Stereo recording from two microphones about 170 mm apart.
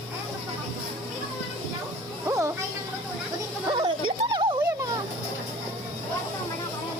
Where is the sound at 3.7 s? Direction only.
25° right (ahead or behind).